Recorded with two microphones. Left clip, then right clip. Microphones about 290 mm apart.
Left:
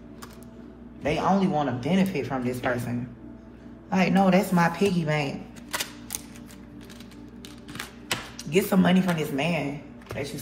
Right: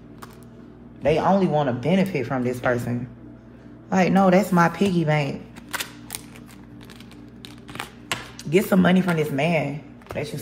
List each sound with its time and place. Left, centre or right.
1.0 s a man's voice: right
8.4 s a man's voice: right